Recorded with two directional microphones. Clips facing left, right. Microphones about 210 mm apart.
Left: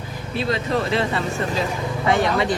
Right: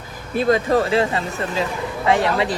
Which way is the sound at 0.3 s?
50° right (ahead or behind).